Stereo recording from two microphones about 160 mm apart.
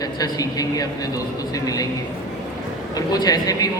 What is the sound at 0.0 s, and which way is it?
A man's voice, 25° left (ahead or behind).